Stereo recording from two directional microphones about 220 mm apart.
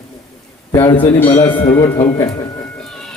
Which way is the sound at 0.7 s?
15° left (ahead or behind).